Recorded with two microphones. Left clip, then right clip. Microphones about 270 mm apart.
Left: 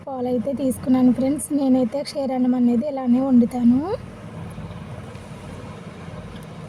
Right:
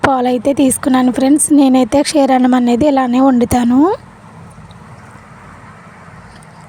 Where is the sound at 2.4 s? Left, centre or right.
Right.